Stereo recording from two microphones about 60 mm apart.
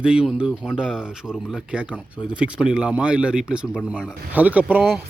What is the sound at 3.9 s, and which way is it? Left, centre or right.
Speech, right.